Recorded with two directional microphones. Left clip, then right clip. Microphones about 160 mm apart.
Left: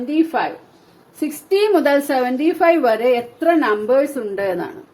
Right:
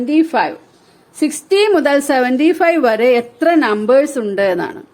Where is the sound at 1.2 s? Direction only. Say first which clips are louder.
Right 4 dB; 55° right (ahead or behind).